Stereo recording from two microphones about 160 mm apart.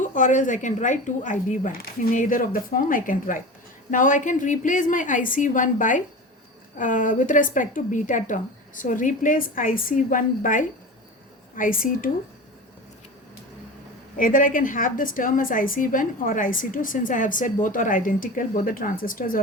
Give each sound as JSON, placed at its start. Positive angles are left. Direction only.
{"t": 0.0, "sound": "a woman's voice", "side_deg": 55}
{"t": 14.2, "sound": "a woman's voice", "side_deg": 60}